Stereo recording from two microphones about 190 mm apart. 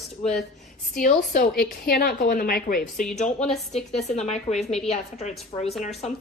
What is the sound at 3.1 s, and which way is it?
A woman's voice, 35° left (ahead or behind).